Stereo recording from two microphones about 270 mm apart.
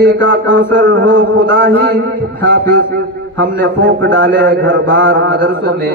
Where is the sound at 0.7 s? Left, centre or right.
Right.